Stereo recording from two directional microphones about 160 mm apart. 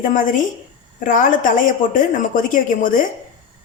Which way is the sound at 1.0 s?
55° left (ahead or behind).